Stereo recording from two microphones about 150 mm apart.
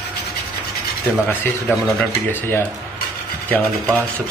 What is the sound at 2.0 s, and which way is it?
Speech, 15° left (ahead or behind).